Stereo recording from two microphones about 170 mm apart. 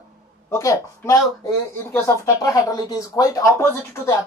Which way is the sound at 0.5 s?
15° left (ahead or behind).